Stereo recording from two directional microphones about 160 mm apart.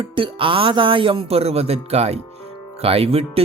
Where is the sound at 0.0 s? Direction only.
35° right (ahead or behind).